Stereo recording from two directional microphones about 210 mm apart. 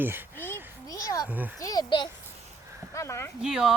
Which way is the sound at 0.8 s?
15° left (ahead or behind).